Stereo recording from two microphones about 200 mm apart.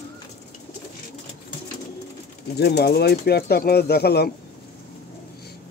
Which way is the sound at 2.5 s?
55° left (ahead or behind).